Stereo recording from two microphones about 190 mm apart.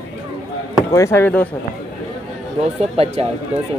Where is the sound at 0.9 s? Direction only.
15° left (ahead or behind).